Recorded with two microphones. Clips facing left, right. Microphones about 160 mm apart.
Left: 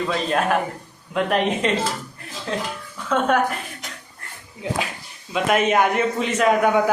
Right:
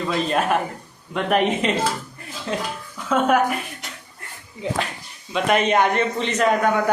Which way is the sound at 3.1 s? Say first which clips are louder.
Right 1 dB; 5° right (ahead or behind).